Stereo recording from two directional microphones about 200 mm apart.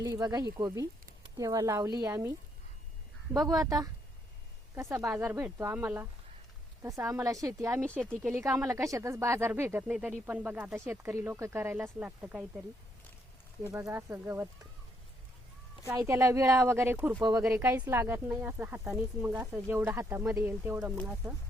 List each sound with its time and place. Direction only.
0.0 s speech: 15° right (ahead or behind)
3.4 s speech: 20° right (ahead or behind)
13.7 s speech: 15° right (ahead or behind)
15.9 s speech: 15° right (ahead or behind)